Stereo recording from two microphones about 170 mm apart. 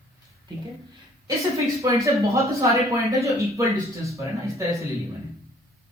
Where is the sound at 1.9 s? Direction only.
20° right (ahead or behind).